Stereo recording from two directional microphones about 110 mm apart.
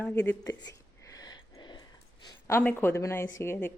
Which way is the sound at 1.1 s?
35° left (ahead or behind).